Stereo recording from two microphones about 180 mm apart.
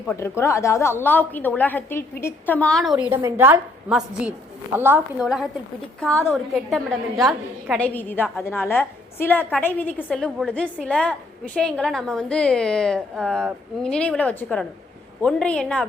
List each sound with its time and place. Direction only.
0.1 s a woman's voice: 15° left (ahead or behind)